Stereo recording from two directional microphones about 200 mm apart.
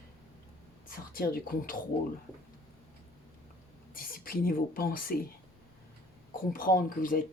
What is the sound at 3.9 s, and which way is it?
Speech, 45° left (ahead or behind).